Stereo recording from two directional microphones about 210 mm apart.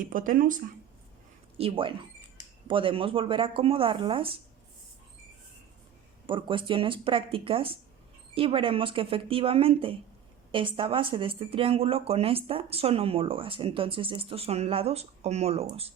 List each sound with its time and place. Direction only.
0.0 s speech: 40° right (ahead or behind)
1.5 s speech: 25° right (ahead or behind)
6.2 s speech: 25° right (ahead or behind)